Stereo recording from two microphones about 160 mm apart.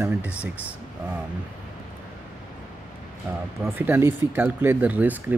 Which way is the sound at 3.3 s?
10° right (ahead or behind).